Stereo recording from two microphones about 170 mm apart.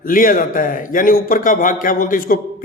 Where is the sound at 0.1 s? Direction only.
55° left (ahead or behind).